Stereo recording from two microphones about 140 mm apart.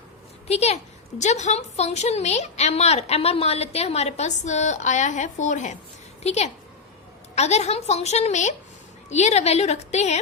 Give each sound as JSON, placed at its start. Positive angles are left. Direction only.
{"t": 0.4, "sound": "a woman's voice", "side_deg": 50}